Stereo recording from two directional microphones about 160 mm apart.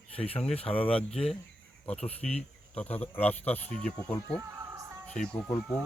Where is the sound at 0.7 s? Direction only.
10° left (ahead or behind).